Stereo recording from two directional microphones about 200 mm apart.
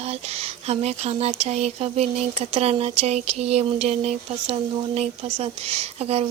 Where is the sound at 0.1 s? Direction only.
30° right (ahead or behind).